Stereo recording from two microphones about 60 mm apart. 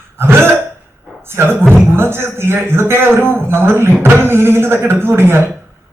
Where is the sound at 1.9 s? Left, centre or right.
Right.